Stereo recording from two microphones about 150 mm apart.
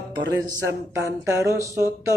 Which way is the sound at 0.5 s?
20° right (ahead or behind).